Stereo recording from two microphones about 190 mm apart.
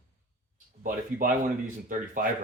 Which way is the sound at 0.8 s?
45° right (ahead or behind).